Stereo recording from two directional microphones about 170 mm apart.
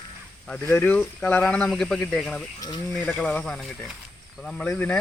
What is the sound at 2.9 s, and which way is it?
Speech, 10° left (ahead or behind).